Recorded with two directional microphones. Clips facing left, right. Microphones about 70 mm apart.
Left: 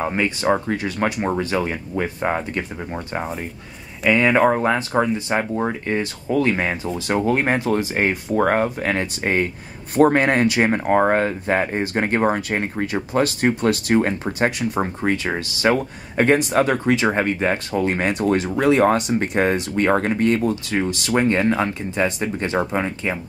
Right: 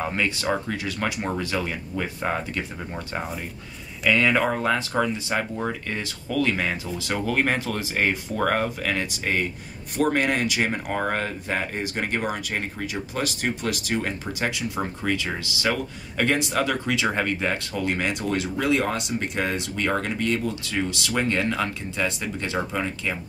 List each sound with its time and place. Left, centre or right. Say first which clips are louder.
0.0 s speech: left 4 dB; left
0.7 s speech: left 6 dB; left
8.8 s speech: left 5 dB; left
17.8 s speech: left 6 dB; left